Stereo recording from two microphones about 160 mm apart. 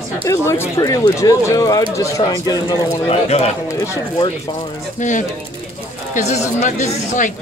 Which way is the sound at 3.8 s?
20° left (ahead or behind).